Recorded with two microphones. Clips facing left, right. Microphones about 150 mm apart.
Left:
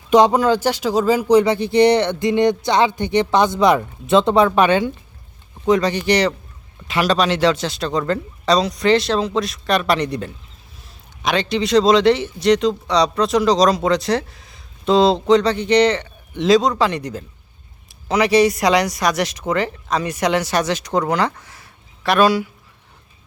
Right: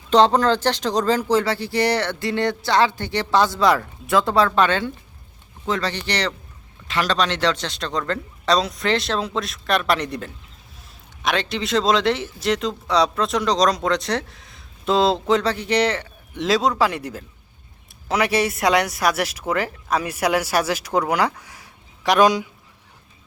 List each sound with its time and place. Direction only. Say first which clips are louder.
0.1 s speech: left 2 dB; 10° left (ahead or behind); by 22.4 s 20° right (ahead or behind)